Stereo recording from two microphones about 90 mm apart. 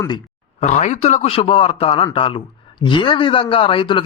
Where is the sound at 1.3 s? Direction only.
90° left.